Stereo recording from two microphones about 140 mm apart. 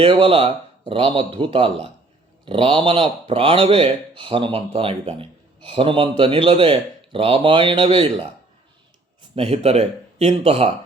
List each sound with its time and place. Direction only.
0.0 s speech: 40° right (ahead or behind)
9.3 s speech: 45° right (ahead or behind)